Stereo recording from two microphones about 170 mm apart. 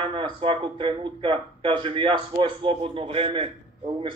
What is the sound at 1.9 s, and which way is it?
Speech, 30° right (ahead or behind).